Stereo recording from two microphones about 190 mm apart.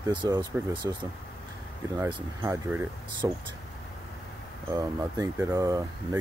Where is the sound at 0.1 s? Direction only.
25° right (ahead or behind).